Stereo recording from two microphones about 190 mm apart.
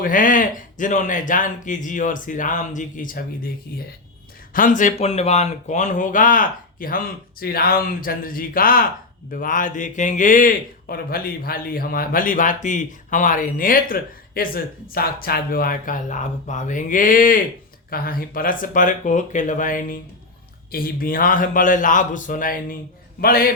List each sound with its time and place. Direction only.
0.0 s a man's voice: 45° left (ahead or behind)
4.5 s a man's voice: 45° left (ahead or behind)